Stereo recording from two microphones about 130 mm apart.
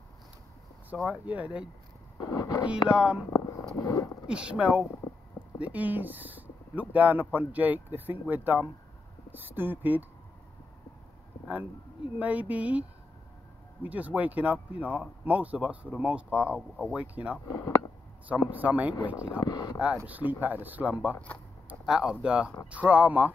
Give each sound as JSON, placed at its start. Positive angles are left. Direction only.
{"t": 1.0, "sound": "speech", "side_deg": -10}
{"t": 2.3, "sound": "a sound", "side_deg": 30}
{"t": 2.9, "sound": "speech", "side_deg": -5}
{"t": 3.8, "sound": "speech", "side_deg": 25}
{"t": 4.3, "sound": "speech", "side_deg": -5}
{"t": 12.2, "sound": "speech", "side_deg": -10}
{"t": 13.8, "sound": "speech", "side_deg": -10}
{"t": 17.5, "sound": "speech", "side_deg": 25}
{"t": 18.3, "sound": "speech", "side_deg": -10}
{"t": 19.4, "sound": "speech", "side_deg": 30}
{"t": 20.1, "sound": "speech", "side_deg": -15}